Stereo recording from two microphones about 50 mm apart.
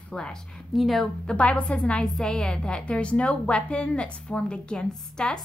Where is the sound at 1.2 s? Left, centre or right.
Left.